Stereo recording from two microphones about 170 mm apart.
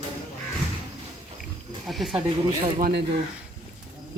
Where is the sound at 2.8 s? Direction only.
75° right (ahead or behind).